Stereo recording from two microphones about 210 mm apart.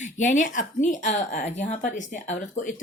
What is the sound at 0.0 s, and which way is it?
Speech, 35° left (ahead or behind).